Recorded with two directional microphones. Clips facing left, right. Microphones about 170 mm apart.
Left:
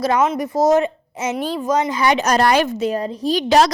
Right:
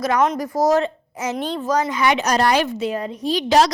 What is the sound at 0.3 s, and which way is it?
A woman's voice, 20° left (ahead or behind).